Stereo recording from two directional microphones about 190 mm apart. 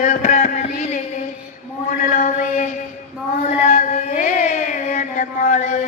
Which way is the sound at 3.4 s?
40° left (ahead or behind).